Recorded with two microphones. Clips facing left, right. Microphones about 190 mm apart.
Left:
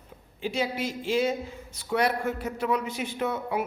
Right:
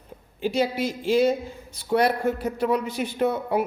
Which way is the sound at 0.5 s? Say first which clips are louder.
Right 5 dB; 35° right (ahead or behind).